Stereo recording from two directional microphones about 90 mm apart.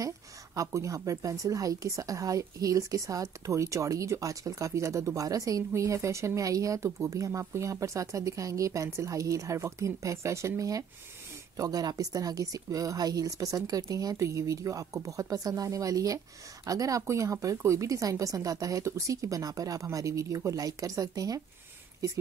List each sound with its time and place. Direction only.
0.6 s a woman's voice: 35° right (ahead or behind)